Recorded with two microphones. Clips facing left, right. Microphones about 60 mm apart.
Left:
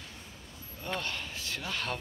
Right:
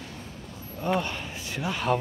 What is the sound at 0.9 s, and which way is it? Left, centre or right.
Speech, centre.